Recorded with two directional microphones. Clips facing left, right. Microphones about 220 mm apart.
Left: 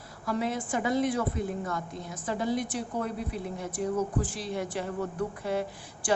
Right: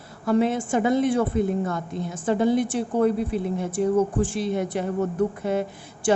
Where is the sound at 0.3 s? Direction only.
25° right (ahead or behind).